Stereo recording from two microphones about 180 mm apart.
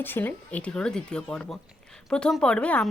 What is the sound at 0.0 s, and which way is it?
Speech, 10° left (ahead or behind).